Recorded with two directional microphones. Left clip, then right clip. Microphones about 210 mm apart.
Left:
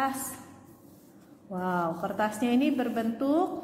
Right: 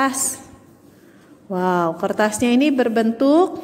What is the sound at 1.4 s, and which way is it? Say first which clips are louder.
A woman's voice: right 11 dB; 40° right (ahead or behind).